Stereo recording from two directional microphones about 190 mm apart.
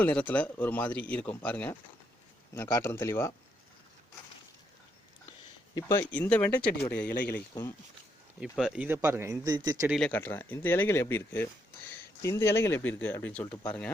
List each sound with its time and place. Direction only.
0.0 s speech: 5° left (ahead or behind)
5.7 s speech: 15° left (ahead or behind)
7.1 s a man's voice: 50° left (ahead or behind)
8.5 s speech: 5° right (ahead or behind); by 9.7 s 20° right (ahead or behind)
9.8 s speech: centre (ahead or behind)